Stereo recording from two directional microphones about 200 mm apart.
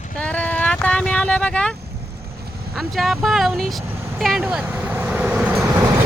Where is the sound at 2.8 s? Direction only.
Centre (ahead or behind).